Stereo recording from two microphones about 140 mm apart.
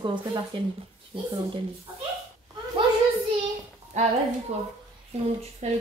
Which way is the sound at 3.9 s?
60° right (ahead or behind).